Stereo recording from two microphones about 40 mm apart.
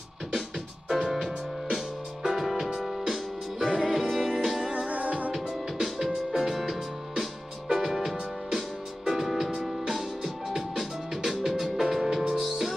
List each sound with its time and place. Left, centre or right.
0.8 s music: centre
4.2 s music: centre
4.8 s music: right
5.3 s music: centre